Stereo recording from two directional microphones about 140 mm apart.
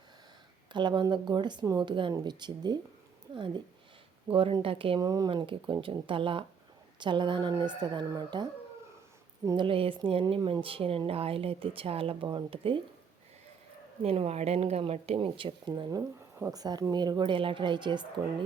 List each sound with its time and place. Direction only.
0.7 s speech: 35° right (ahead or behind)
4.9 s speech: 25° right (ahead or behind)
9.5 s speech: 35° right (ahead or behind)
14.0 s speech: 45° right (ahead or behind)